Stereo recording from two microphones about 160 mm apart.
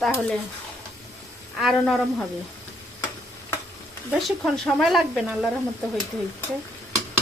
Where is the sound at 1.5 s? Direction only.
Centre (ahead or behind).